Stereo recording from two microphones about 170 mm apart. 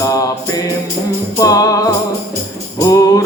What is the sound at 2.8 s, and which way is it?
Mantra, 20° left (ahead or behind).